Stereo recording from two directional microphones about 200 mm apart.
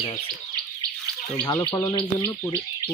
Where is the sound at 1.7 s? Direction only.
20° left (ahead or behind).